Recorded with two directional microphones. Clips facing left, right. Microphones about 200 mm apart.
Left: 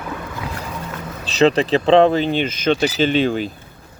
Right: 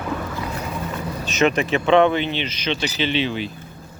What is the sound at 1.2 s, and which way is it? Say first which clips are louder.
Speech: left 4 dB; 35° left (ahead or behind).